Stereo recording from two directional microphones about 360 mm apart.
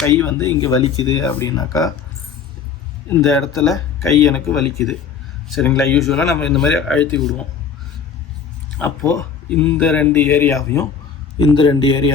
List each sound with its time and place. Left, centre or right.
0.0 s speech: centre
3.1 s speech: centre
8.8 s speech: centre